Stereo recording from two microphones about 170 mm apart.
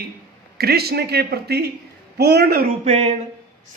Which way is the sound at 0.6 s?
65° right (ahead or behind).